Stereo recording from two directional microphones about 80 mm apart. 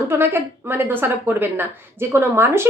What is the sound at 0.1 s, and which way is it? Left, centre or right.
A woman's voice, right.